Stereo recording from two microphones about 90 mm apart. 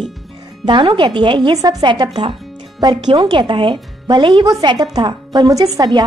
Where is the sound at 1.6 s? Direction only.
45° right (ahead or behind).